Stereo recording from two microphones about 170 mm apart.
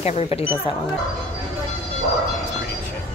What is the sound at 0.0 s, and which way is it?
Speech, 40° left (ahead or behind).